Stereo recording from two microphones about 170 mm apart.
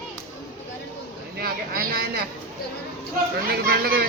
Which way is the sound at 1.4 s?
60° right (ahead or behind).